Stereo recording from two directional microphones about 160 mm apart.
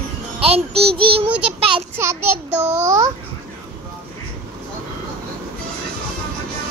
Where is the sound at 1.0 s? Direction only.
35° right (ahead or behind).